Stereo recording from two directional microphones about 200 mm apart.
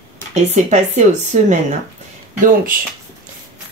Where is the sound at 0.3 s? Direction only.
35° right (ahead or behind).